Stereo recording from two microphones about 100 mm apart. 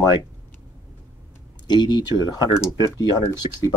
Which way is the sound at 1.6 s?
45° left (ahead or behind).